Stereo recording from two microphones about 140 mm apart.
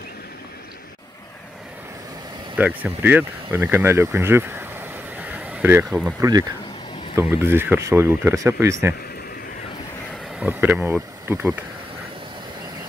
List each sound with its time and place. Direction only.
2.5 s speech: 10° right (ahead or behind)
5.3 s a sound: 10° right (ahead or behind)
7.2 s speech: 15° right (ahead or behind)
10.4 s speech: 10° right (ahead or behind)